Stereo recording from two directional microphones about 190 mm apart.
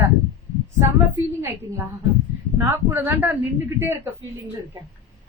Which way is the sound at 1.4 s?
10° right (ahead or behind).